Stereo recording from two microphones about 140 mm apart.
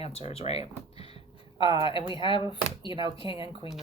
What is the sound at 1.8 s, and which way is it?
Speech, 40° left (ahead or behind).